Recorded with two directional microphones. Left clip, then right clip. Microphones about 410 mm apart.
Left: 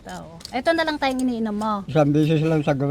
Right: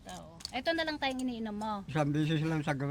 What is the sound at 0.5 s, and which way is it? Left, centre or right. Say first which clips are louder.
Speech: left 12 dB; centre.